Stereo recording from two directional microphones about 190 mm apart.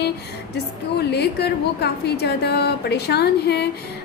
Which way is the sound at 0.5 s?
60° left (ahead or behind).